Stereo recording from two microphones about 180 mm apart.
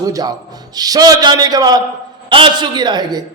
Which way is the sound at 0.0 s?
20° right (ahead or behind).